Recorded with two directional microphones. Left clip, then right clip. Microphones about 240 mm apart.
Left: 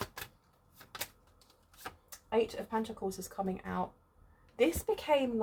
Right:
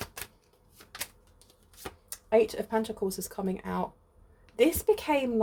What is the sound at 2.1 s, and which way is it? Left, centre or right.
Speech, right.